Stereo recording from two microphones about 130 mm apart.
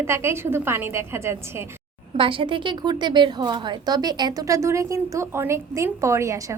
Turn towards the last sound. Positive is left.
turn(degrees=-25)  # may be behind; listen again after turning